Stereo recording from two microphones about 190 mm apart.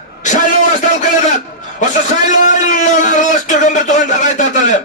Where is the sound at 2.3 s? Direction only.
40° left (ahead or behind).